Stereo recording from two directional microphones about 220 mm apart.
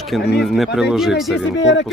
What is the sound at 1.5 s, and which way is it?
Speech, 55° left (ahead or behind).